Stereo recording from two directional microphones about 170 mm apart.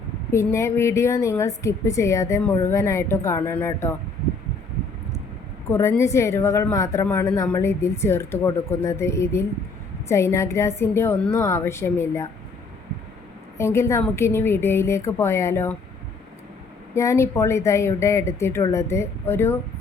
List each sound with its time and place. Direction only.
0.3 s a woman's voice: 15° left (ahead or behind)
5.6 s a woman's voice: 15° left (ahead or behind)
13.6 s a woman's voice: 15° left (ahead or behind)
16.9 s a woman's voice: 15° left (ahead or behind)